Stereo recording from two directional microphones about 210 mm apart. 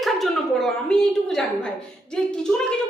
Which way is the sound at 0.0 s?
Centre (ahead or behind).